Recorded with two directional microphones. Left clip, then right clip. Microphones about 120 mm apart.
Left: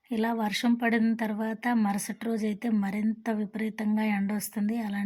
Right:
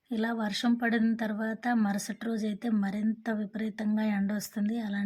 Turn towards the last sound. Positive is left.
turn(degrees=20)  # may be behind; listen again after turning